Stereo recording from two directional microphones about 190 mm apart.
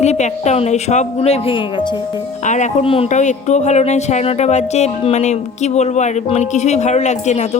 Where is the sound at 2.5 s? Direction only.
40° left (ahead or behind).